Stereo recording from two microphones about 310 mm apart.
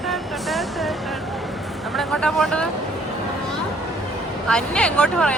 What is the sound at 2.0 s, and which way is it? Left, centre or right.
Vehicle, centre.